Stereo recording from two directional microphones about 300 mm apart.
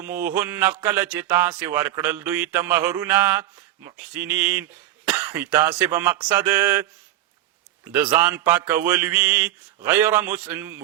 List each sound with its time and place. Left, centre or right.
0.0 s a man's voice: centre
7.9 s a man's voice: centre